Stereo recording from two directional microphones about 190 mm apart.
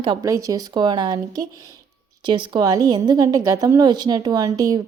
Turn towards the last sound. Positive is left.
turn(degrees=-20)  # may be behind; listen again after turning